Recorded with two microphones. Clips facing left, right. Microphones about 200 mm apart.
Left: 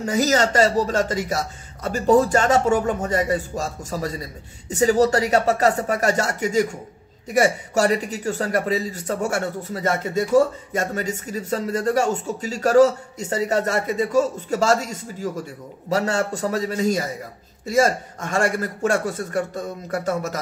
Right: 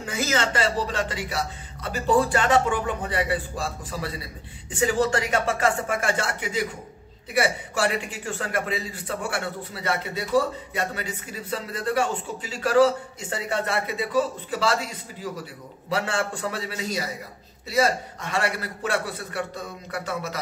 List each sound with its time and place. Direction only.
0.0 s a man's voice: 40° left (ahead or behind)